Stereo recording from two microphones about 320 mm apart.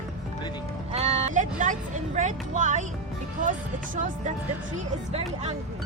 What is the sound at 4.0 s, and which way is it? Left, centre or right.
Speech, right.